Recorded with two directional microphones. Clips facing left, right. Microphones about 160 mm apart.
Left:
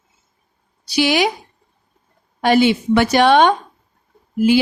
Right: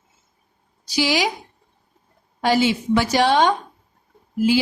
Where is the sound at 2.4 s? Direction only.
65° left (ahead or behind).